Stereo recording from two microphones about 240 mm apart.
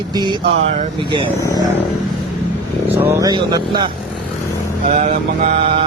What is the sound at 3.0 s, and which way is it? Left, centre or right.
Speech, centre.